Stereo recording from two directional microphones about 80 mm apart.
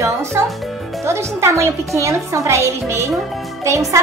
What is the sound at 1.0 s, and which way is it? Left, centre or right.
A woman's voice, right.